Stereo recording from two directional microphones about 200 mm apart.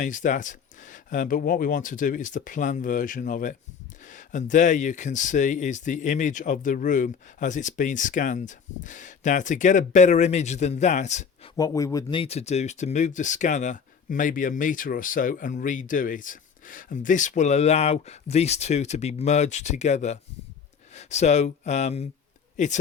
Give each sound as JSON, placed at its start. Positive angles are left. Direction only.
{"t": 0.0, "sound": "speech", "side_deg": 40}
{"t": 11.5, "sound": "speech", "side_deg": 15}